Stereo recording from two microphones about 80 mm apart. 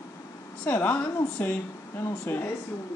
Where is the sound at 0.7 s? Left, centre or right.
Left.